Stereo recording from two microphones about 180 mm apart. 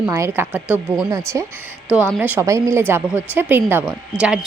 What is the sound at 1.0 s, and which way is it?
A woman's voice, 15° right (ahead or behind).